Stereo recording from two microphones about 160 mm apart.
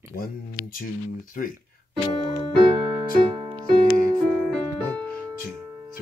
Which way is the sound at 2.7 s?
25° right (ahead or behind).